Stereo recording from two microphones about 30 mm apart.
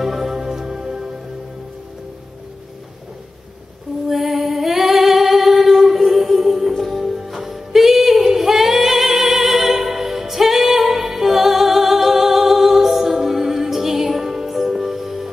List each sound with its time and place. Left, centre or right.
0.0 s music: centre
4.1 s singing: centre
6.9 s music: centre